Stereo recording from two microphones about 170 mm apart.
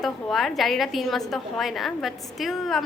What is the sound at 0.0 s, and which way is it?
A woman's voice, centre (ahead or behind).